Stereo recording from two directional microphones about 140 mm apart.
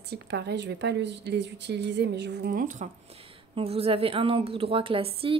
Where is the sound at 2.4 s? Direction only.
85° right.